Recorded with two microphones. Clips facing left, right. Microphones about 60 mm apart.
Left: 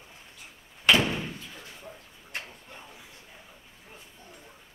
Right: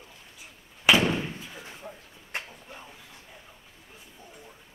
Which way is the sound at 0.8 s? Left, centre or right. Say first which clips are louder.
Right 1 dB; centre.